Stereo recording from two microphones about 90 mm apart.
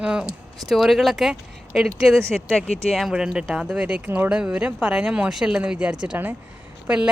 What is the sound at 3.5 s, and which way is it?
Speech, 10° right (ahead or behind).